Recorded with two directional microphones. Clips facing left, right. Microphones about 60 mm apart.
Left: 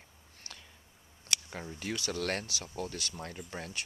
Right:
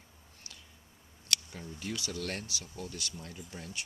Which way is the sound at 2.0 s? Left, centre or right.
Left.